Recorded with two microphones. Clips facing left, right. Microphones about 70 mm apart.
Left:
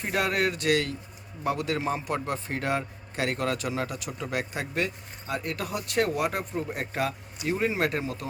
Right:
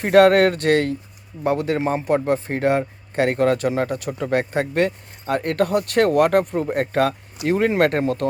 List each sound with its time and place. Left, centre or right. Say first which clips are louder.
0.0 s a man's voice: right 14 dB; right